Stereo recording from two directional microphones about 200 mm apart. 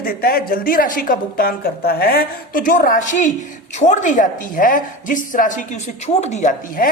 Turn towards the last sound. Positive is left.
turn(degrees=40)  # may be behind; listen again after turning